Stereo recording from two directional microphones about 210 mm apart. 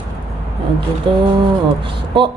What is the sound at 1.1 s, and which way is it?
Speech, 25° right (ahead or behind).